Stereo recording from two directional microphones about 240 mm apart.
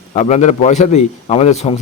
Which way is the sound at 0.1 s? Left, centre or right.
Left.